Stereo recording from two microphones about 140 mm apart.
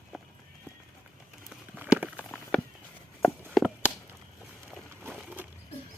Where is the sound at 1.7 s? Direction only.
10° right (ahead or behind).